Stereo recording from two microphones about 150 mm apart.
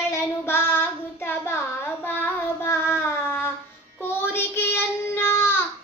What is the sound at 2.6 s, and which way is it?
Child singing, 15° left (ahead or behind).